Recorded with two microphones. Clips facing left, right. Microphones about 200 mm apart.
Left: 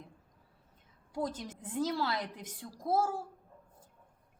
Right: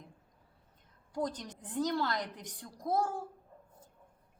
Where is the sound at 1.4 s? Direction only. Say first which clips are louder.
Even; 5° left (ahead or behind).